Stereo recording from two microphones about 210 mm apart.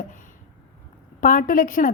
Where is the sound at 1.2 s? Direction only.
40° left (ahead or behind).